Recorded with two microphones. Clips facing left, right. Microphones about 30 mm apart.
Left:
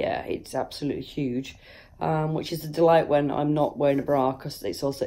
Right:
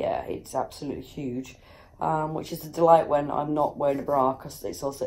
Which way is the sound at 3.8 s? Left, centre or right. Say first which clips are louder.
Left 2 dB; left.